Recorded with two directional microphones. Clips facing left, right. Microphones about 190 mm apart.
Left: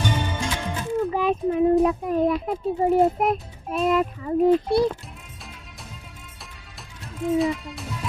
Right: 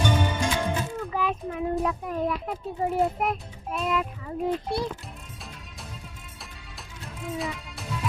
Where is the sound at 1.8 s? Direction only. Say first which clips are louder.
Left 7 dB; 25° left (ahead or behind).